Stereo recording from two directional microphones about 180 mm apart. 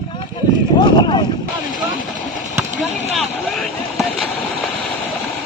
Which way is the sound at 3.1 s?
Centre (ahead or behind).